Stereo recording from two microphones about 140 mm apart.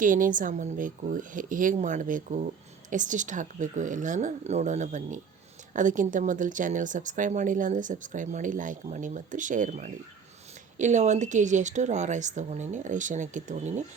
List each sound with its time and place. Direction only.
0.0 s speech: 70° right (ahead or behind)